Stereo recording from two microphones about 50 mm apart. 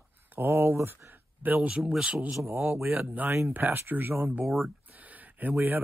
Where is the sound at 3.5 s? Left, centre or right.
Right.